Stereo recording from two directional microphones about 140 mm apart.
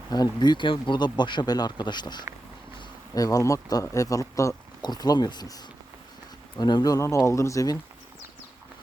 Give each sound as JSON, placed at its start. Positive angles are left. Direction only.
{"t": 0.1, "sound": "speech", "side_deg": 30}
{"t": 6.6, "sound": "speech", "side_deg": 30}